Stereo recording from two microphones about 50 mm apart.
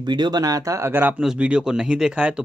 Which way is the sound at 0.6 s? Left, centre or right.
Right.